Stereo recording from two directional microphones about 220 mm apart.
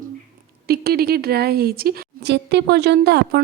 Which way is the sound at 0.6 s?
45° right (ahead or behind).